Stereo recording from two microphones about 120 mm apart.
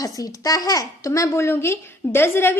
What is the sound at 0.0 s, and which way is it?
A woman's voice, 30° left (ahead or behind).